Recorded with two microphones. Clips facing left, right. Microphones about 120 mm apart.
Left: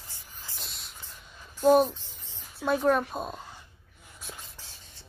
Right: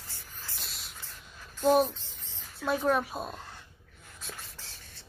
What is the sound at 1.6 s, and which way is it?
Speech, centre (ahead or behind).